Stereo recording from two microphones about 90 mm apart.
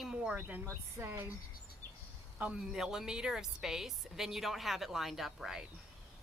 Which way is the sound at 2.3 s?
10° right (ahead or behind).